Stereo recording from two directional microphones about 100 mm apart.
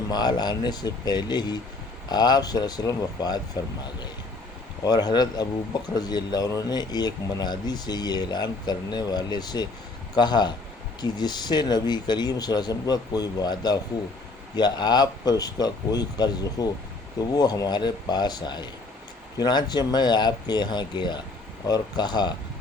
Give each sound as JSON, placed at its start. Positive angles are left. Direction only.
{"t": 0.1, "sound": "speech", "side_deg": 45}
{"t": 4.8, "sound": "speech", "side_deg": 40}